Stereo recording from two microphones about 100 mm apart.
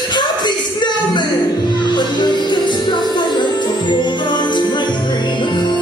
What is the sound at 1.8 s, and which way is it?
Music, 50° left (ahead or behind).